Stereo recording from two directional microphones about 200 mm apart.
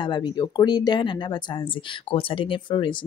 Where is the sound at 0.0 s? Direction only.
20° left (ahead or behind).